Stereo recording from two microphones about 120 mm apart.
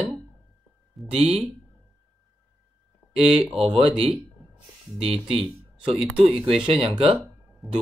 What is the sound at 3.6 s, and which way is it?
Speech, 55° right (ahead or behind).